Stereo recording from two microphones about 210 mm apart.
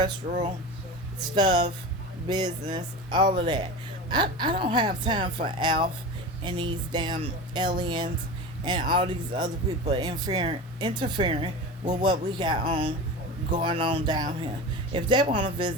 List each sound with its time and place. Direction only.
0.2 s speech: 40° right (ahead or behind)
1.4 s speech: 20° right (ahead or behind)